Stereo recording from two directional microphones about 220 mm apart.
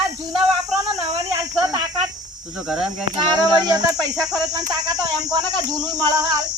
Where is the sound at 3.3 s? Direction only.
15° right (ahead or behind).